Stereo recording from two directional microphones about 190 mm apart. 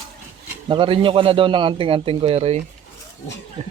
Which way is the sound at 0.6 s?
25° right (ahead or behind).